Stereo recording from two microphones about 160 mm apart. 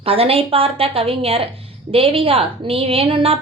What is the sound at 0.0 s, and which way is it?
A woman's voice, 35° right (ahead or behind).